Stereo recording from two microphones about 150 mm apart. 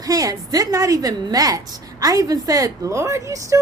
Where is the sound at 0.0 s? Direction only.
25° right (ahead or behind).